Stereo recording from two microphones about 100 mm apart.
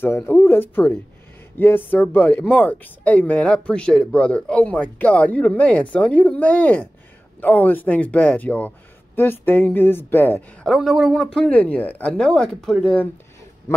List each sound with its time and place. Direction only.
0.0 s a man's voice: 25° left (ahead or behind)
10.6 s speech: centre (ahead or behind)
11.2 s speech: 10° left (ahead or behind)